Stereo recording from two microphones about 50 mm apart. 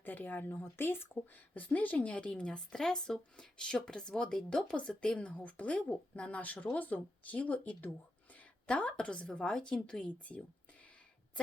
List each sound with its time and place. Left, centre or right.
0.0 s speech: left
1.5 s speech: left
2.7 s a woman's voice: centre